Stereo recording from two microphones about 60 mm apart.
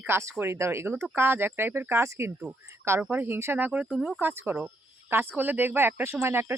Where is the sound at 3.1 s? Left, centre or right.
Right.